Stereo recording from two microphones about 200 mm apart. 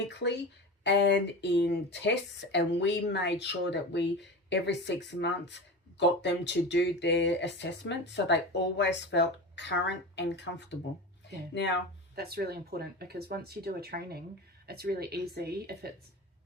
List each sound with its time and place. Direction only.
0.1 s speech: 60° left (ahead or behind)
12.1 s speech: 50° right (ahead or behind)